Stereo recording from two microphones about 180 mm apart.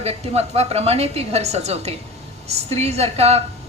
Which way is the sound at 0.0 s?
35° right (ahead or behind).